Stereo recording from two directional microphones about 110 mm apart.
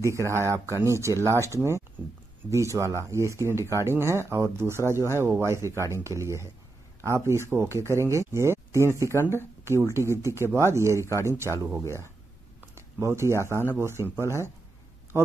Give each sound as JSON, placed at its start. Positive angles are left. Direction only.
{"t": 0.0, "sound": "speech", "side_deg": -25}
{"t": 5.8, "sound": "speech", "side_deg": 25}
{"t": 6.0, "sound": "speech", "side_deg": -25}